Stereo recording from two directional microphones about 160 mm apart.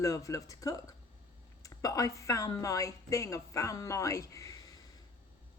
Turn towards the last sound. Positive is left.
turn(degrees=20)  # may be behind; listen again after turning